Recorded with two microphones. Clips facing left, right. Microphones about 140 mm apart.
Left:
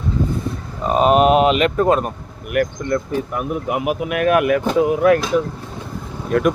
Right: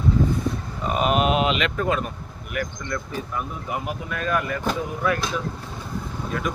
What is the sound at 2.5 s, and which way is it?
Speech, 60° left (ahead or behind).